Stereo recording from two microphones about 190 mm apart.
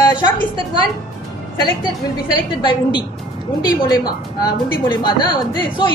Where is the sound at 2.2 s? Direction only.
25° left (ahead or behind).